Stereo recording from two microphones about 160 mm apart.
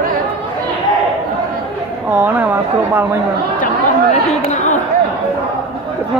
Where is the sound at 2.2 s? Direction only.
10° right (ahead or behind).